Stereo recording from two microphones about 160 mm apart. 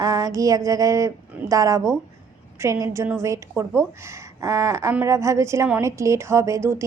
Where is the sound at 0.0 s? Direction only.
20° right (ahead or behind).